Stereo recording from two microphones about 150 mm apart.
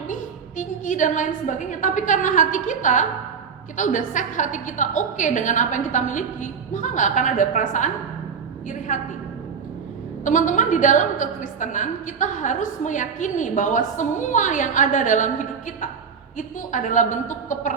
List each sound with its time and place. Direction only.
0.1 s a woman's voice: 60° left (ahead or behind)
10.2 s a woman's voice: 60° left (ahead or behind)